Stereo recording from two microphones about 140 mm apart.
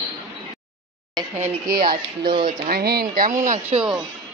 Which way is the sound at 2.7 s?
90° right.